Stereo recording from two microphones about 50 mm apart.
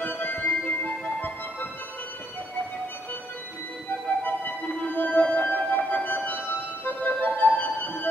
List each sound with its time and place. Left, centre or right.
0.0 s music: left
4.2 s music: left